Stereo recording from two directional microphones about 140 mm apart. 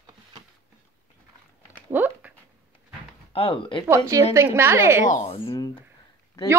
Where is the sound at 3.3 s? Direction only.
40° left (ahead or behind).